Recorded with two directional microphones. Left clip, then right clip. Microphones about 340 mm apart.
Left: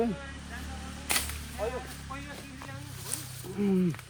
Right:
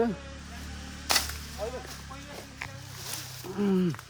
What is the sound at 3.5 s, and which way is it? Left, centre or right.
Speech, right.